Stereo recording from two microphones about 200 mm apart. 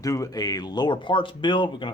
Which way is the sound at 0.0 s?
15° left (ahead or behind).